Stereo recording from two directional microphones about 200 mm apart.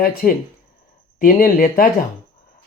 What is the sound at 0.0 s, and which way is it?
Speech, 45° left (ahead or behind).